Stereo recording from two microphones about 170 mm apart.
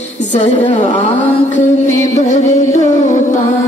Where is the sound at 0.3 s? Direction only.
40° left (ahead or behind).